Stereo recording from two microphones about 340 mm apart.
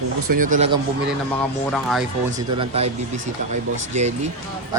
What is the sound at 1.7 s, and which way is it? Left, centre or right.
Speech, centre.